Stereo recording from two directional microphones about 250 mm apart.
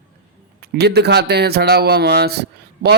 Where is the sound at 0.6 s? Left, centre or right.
Right.